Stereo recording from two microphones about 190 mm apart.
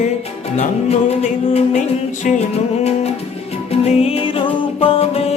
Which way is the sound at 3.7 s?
35° left (ahead or behind).